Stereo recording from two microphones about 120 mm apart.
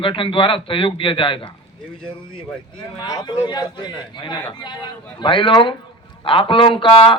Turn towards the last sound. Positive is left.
turn(degrees=45)  # may be behind; listen again after turning